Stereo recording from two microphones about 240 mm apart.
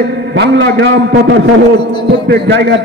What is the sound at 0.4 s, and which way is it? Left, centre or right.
A man's voice, right.